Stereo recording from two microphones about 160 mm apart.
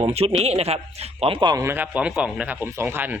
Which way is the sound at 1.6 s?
15° right (ahead or behind).